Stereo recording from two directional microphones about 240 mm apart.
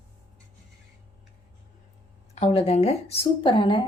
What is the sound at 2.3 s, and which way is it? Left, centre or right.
A woman's voice, left.